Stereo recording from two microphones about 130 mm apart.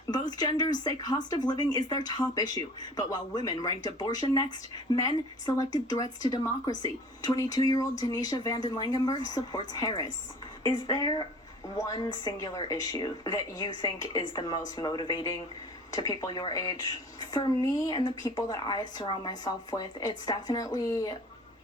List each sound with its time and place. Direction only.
0.1 s a woman's voice: 30° left (ahead or behind)